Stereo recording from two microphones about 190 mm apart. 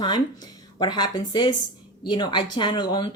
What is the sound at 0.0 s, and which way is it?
Speech, 20° left (ahead or behind).